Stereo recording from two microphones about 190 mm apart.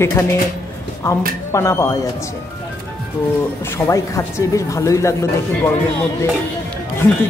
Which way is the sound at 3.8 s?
15° left (ahead or behind).